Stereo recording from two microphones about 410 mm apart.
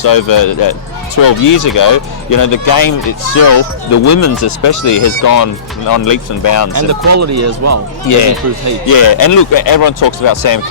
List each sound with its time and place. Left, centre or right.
0.0 s speech: left
6.7 s speech: right
8.0 s speech: left